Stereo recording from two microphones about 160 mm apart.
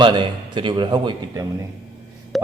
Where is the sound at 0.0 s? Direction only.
30° right (ahead or behind).